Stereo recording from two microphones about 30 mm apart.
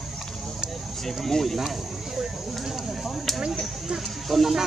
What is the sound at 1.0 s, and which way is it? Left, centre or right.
Speech, centre.